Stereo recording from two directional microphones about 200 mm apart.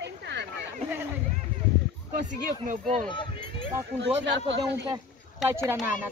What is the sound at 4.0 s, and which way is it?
Speech, 60° right (ahead or behind).